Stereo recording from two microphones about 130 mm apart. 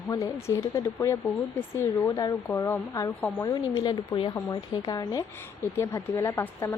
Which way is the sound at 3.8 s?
35° left (ahead or behind).